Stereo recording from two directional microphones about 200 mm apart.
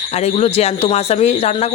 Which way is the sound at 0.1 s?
35° left (ahead or behind).